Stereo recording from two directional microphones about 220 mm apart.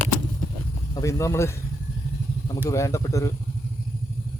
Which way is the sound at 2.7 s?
15° left (ahead or behind).